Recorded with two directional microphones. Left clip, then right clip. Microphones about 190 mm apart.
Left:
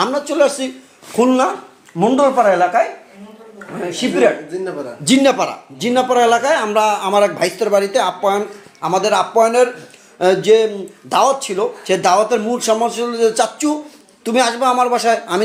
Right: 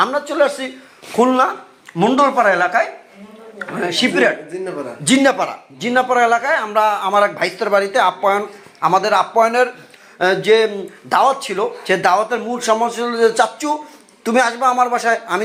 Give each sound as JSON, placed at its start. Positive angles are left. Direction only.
{"t": 0.0, "sound": "a man's voice", "side_deg": 20}
{"t": 2.0, "sound": "a man's voice", "side_deg": 0}
{"t": 5.0, "sound": "a man's voice", "side_deg": 15}